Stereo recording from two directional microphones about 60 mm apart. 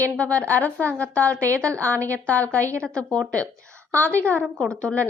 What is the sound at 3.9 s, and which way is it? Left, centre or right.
A woman's voice, left.